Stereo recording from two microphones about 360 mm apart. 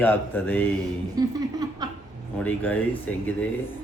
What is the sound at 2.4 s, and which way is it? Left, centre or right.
Mantra, centre.